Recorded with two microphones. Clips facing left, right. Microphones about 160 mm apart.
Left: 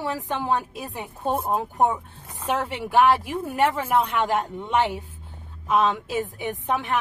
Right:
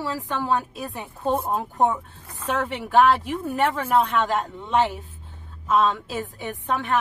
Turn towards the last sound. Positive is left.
turn(degrees=15)  # may be behind; listen again after turning